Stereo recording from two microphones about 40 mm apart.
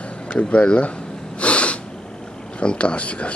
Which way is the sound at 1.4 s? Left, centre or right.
Left.